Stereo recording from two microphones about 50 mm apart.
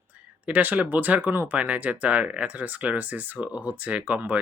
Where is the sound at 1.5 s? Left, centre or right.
Right.